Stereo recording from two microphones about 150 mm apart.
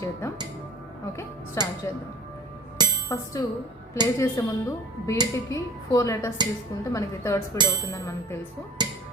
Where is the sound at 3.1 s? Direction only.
20° left (ahead or behind).